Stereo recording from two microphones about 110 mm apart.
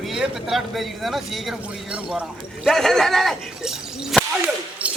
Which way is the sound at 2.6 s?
Centre (ahead or behind).